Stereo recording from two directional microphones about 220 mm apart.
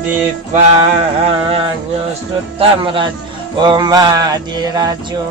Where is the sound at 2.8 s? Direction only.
20° right (ahead or behind).